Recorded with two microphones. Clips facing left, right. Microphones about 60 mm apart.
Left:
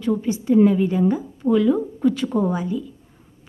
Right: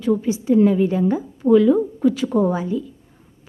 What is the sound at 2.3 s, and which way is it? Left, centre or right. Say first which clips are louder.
Speech: right 3 dB; right.